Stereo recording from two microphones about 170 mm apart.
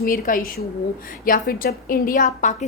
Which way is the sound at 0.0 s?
55° left (ahead or behind).